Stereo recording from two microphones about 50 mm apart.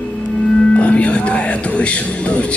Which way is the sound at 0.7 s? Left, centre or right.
Left.